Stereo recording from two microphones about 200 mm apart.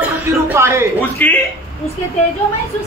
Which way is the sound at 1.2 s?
10° left (ahead or behind).